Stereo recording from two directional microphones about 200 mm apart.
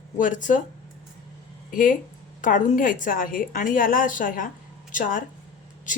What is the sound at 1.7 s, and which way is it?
Speech, 40° left (ahead or behind).